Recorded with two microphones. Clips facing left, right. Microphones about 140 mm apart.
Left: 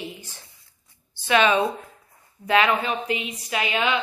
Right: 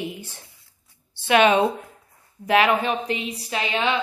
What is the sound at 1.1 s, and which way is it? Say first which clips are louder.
Speech: right 3 dB; 55° right (ahead or behind).